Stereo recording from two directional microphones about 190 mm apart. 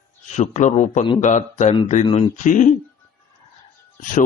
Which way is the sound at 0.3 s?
40° left (ahead or behind).